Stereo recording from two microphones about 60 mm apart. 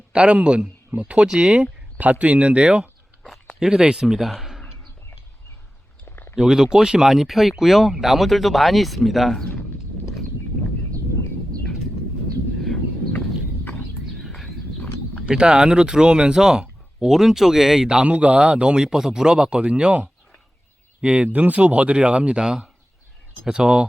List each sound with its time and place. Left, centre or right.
0.1 s speech: centre
4.3 s a sound: centre
6.1 s a sound: left
6.3 s speech: centre
14.2 s horse: centre
15.3 s speech: centre